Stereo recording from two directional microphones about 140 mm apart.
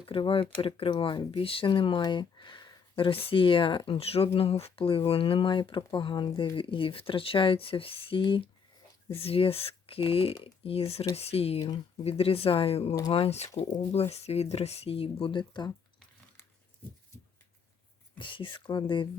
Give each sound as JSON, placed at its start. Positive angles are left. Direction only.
{"t": 0.0, "sound": "speech", "side_deg": 40}
{"t": 18.2, "sound": "speech", "side_deg": 35}